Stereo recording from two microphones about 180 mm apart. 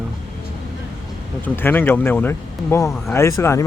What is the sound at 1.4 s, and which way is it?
Speech, 10° left (ahead or behind).